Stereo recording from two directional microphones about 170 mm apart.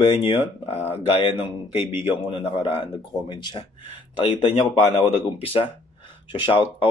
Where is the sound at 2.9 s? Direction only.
25° left (ahead or behind).